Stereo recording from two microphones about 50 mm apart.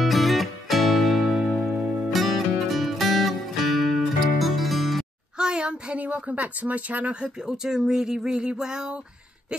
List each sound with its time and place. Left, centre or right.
0.0 s music: centre
1.7 s music: centre
2.0 s music: centre
5.4 s speech: centre
7.2 s speech: centre